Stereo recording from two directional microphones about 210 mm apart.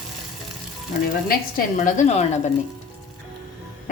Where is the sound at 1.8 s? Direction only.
35° left (ahead or behind).